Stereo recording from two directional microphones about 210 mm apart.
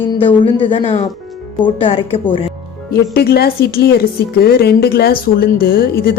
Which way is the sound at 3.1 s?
45° left (ahead or behind).